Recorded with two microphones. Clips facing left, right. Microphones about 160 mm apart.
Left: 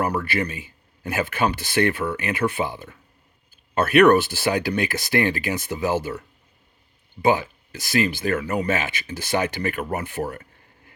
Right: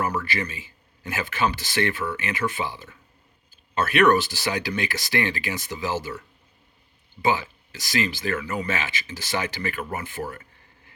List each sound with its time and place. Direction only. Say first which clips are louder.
0.2 s speech: left 4 dB; 55° left (ahead or behind)